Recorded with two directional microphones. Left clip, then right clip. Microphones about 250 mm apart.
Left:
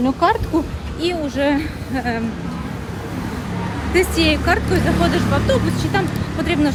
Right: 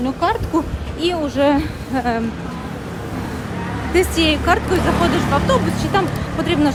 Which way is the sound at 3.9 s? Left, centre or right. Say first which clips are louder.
Even; centre.